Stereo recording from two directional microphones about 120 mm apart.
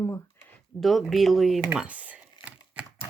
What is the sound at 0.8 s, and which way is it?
Speech, centre (ahead or behind).